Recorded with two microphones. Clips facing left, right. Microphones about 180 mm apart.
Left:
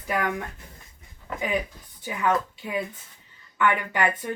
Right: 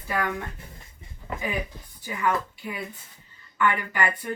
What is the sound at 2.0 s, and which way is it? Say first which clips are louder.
Speech: left 2 dB; 20° left (ahead or behind).